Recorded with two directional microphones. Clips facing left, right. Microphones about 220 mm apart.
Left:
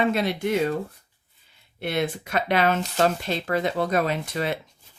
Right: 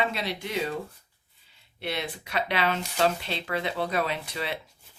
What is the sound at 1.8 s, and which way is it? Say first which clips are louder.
Speech: left 7 dB; 50° left (ahead or behind).